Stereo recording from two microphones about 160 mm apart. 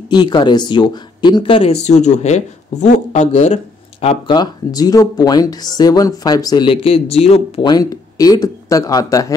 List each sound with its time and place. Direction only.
0.1 s speech: 25° left (ahead or behind)
4.3 s speech: 25° left (ahead or behind)
7.7 s speech: 25° left (ahead or behind)